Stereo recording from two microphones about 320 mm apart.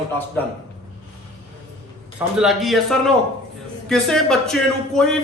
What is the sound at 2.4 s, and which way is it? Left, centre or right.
A man's voice, centre.